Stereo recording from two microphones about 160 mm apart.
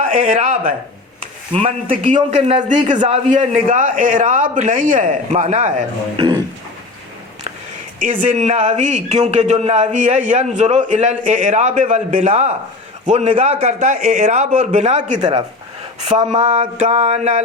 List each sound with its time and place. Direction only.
0.0 s speech: 55° right (ahead or behind)
1.9 s a man's voice: 50° right (ahead or behind)
6.1 s speech: 25° right (ahead or behind)
7.9 s a man's voice: 55° right (ahead or behind)
15.2 s speech: 25° right (ahead or behind)
16.0 s a man's voice: 40° right (ahead or behind)